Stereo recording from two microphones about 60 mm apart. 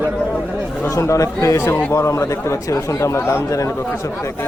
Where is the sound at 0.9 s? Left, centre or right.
Left.